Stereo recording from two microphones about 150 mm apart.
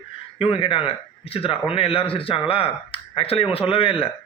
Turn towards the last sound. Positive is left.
turn(degrees=40)  # may be behind; listen again after turning